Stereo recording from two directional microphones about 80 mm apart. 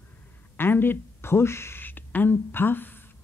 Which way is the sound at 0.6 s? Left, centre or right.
Left.